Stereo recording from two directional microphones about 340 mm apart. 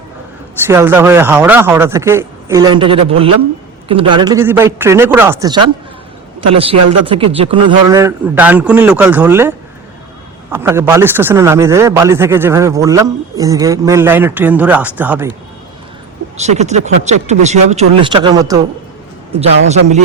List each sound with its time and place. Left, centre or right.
0.7 s a man's voice: centre
16.4 s a man's voice: centre